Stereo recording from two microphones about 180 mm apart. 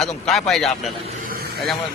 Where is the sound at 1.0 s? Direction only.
50° right (ahead or behind).